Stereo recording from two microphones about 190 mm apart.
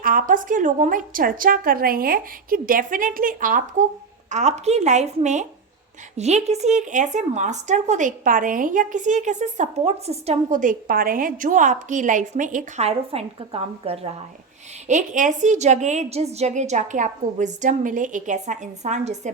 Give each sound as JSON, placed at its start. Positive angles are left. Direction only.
{"t": 0.0, "sound": "speech", "side_deg": -45}